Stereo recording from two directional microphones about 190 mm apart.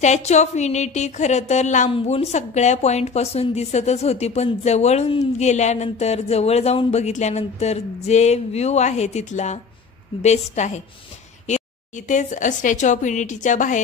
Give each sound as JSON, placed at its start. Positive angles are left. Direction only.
{"t": 0.0, "sound": "a woman's voice", "side_deg": 35}
{"t": 12.1, "sound": "a woman's voice", "side_deg": 40}